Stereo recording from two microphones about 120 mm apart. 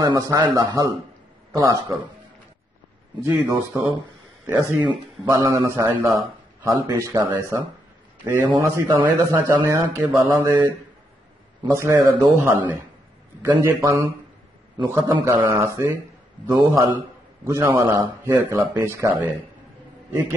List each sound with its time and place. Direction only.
0.0 s speech: 30° right (ahead or behind)
3.3 s a man's voice: 15° right (ahead or behind)
11.7 s a man's voice: 20° right (ahead or behind)